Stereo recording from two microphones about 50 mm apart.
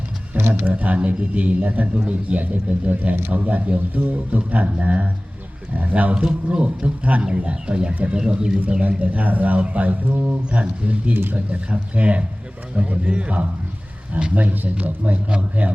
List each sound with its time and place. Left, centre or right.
0.3 s a sound: right
0.7 s a man's voice: right
8.8 s a man's voice: right